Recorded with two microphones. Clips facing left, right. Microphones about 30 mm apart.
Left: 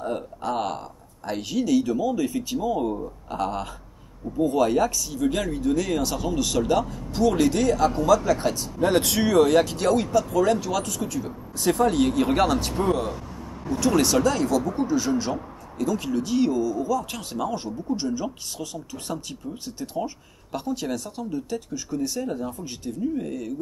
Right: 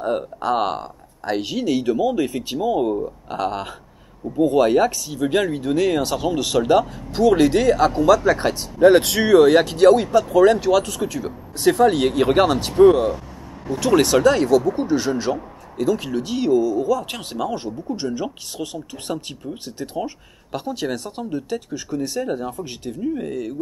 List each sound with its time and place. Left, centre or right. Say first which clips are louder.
0.0 s speech: right 6 dB; right
2.0 s speech: right 4 dB; right
3.3 s speech: even; right
8.4 s speech: right 3 dB; right
8.7 s speech: right 9 dB; right
9.6 s speech: right 7 dB; right; by 13.2 s centre
13.7 s speech: right 4 dB; right
14.7 s speech: right 3 dB; right
15.9 s speech: right 2 dB; right